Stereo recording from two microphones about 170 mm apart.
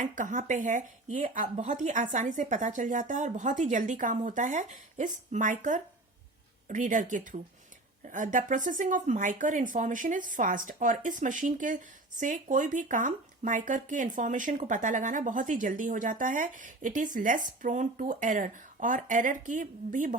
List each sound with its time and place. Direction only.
0.0 s speech: 50° right (ahead or behind)